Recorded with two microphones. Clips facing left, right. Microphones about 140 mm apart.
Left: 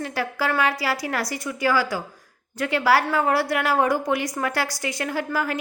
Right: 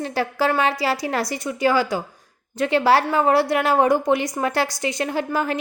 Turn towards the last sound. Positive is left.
turn(degrees=-25)  # may be behind; listen again after turning